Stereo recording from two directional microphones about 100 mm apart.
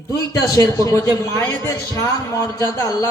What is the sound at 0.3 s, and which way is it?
Speech, 35° left (ahead or behind).